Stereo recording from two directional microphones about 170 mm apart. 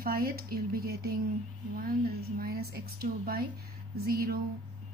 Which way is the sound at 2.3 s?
65° right (ahead or behind).